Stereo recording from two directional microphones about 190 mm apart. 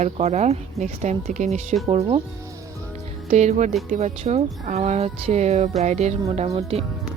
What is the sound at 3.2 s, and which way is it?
Speech, 40° right (ahead or behind).